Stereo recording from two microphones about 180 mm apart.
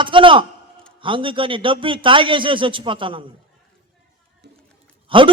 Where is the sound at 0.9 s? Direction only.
30° right (ahead or behind).